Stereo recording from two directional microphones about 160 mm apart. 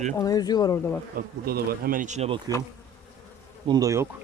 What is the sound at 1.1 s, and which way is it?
Bee, 70° right (ahead or behind).